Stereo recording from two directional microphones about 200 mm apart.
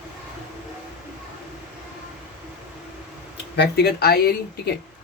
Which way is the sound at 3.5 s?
55° left (ahead or behind).